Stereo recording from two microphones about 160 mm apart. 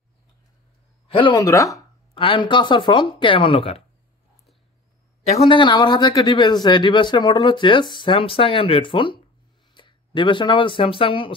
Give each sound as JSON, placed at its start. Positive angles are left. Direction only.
{"t": 1.0, "sound": "a sound", "side_deg": 35}
{"t": 1.3, "sound": "speech", "side_deg": 20}
{"t": 2.1, "sound": "speech", "side_deg": 35}
{"t": 5.3, "sound": "speech", "side_deg": 35}